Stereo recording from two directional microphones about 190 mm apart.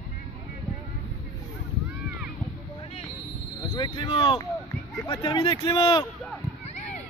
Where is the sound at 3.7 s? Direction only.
25° left (ahead or behind).